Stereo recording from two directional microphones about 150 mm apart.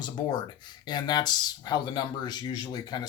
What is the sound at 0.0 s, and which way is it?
Speech, 30° left (ahead or behind).